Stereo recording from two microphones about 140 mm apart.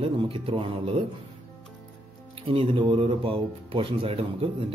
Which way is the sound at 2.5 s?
35° right (ahead or behind).